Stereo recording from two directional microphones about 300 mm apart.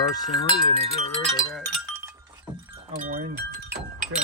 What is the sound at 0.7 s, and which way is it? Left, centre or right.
Speech, centre.